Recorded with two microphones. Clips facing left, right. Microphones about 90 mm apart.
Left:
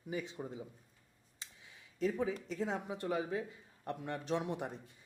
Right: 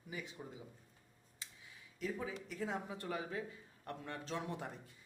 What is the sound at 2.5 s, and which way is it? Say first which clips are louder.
Speech: left 4 dB; 20° left (ahead or behind).